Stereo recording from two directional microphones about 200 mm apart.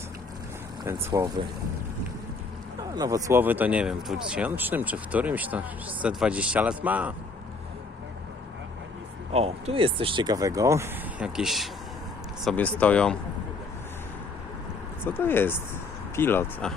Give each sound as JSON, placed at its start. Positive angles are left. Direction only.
{"t": 1.1, "sound": "speech", "side_deg": -15}
{"t": 2.9, "sound": "speech", "side_deg": -20}
{"t": 9.3, "sound": "speech", "side_deg": -30}
{"t": 15.0, "sound": "speech", "side_deg": 10}